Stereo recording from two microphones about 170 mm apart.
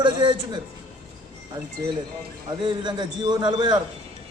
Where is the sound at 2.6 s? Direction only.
25° right (ahead or behind).